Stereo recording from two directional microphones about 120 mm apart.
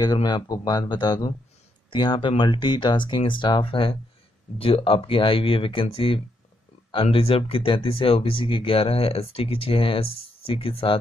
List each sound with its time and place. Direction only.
0.0 s speech: 35° left (ahead or behind); by 11.0 s 50° left (ahead or behind)